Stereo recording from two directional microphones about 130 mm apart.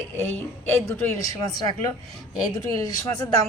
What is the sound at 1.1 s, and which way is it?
Speech, 25° left (ahead or behind).